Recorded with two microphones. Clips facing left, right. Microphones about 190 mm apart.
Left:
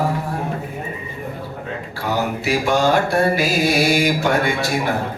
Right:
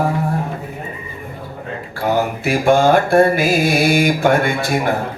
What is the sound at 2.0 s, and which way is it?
Mantra, 50° right (ahead or behind).